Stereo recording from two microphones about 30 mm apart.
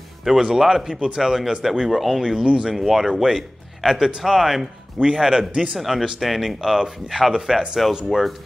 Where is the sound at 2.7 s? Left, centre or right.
Centre.